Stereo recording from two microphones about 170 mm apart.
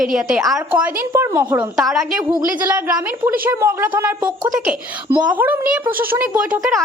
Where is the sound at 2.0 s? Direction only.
55° right (ahead or behind).